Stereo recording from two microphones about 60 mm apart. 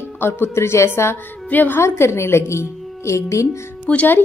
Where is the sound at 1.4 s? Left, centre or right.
Left.